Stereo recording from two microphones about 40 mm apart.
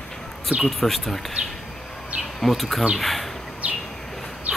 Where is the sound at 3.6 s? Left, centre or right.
Right.